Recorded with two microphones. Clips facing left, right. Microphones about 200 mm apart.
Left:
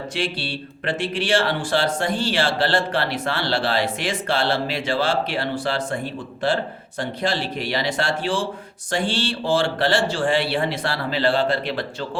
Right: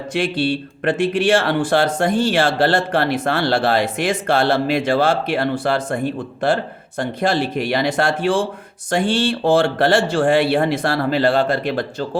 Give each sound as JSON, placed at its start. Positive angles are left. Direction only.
{"t": 0.1, "sound": "speech", "side_deg": -50}